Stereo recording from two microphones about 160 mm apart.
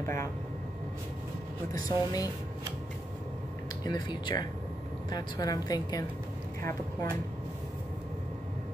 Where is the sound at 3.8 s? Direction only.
25° left (ahead or behind).